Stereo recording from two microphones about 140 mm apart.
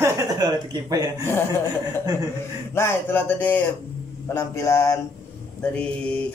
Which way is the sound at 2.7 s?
20° left (ahead or behind).